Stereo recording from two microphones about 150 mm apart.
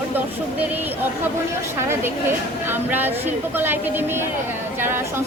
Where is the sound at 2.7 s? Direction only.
15° right (ahead or behind).